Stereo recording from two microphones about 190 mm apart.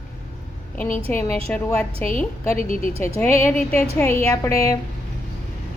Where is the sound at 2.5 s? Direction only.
45° left (ahead or behind).